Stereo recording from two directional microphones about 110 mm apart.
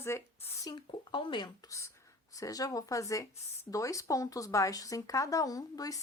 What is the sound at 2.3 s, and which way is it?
Speech, 30° left (ahead or behind).